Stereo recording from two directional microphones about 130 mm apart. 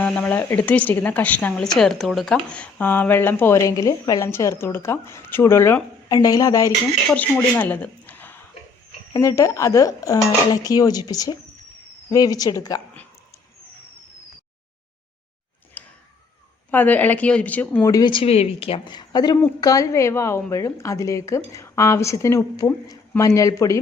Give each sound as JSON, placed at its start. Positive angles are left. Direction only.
{"t": 0.0, "sound": "speech", "side_deg": 10}
{"t": 7.1, "sound": "a woman's voice", "side_deg": 10}
{"t": 15.8, "sound": "a sound", "side_deg": 15}
{"t": 16.7, "sound": "speech", "side_deg": 15}
{"t": 17.8, "sound": "a woman's voice", "side_deg": 25}
{"t": 18.1, "sound": "speech", "side_deg": 45}
{"t": 18.9, "sound": "a woman's voice", "side_deg": 30}